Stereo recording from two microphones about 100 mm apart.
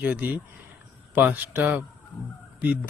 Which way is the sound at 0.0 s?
15° right (ahead or behind).